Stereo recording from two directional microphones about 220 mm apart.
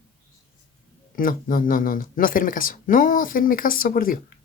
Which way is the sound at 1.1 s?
40° left (ahead or behind).